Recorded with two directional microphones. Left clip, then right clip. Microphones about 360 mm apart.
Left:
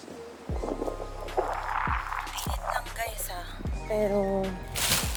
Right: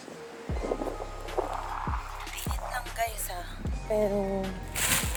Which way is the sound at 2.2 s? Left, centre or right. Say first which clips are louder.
Left 4 dB; centre.